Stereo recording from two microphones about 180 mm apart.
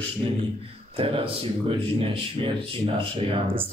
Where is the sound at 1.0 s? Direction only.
30° right (ahead or behind).